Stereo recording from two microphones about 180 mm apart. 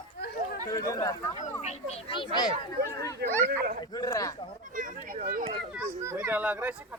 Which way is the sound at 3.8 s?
20° left (ahead or behind).